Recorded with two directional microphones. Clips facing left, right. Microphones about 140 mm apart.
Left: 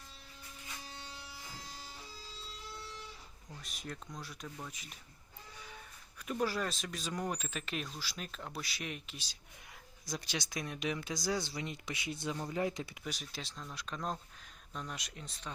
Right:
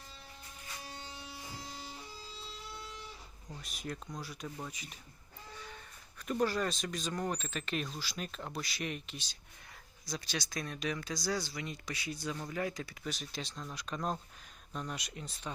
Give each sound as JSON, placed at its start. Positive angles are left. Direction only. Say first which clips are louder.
{"t": 3.6, "sound": "speech", "louder": "right 3 dB", "side_deg": 0}
{"t": 6.4, "sound": "speech", "louder": "right 3 dB", "side_deg": 5}
{"t": 10.1, "sound": "speech", "louder": "even", "side_deg": 20}
{"t": 13.1, "sound": "speech", "louder": "right 3 dB", "side_deg": 5}